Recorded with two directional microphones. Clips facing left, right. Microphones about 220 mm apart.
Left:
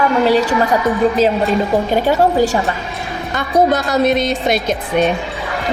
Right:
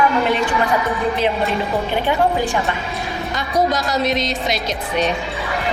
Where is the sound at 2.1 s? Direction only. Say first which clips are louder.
Left 5 dB; 40° left (ahead or behind).